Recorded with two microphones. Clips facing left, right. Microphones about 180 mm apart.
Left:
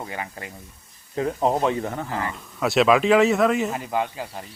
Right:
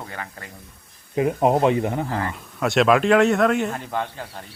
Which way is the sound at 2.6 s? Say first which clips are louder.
Even; centre (ahead or behind).